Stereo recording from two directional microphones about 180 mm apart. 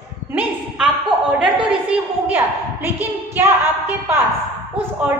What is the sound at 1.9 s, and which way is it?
A woman's voice, 10° right (ahead or behind).